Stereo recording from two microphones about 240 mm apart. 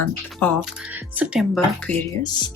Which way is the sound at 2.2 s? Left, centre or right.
Centre.